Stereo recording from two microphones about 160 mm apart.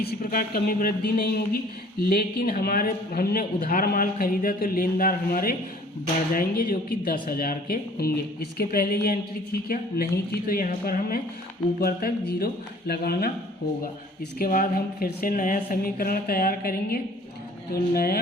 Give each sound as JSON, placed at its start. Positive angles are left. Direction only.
{"t": 0.0, "sound": "a man's voice", "side_deg": 70}
{"t": 14.3, "sound": "speech", "side_deg": 65}